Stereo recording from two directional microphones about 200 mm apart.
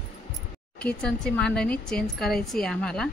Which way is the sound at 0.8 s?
5° left (ahead or behind).